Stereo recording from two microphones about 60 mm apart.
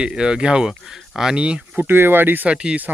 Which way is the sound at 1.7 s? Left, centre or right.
Right.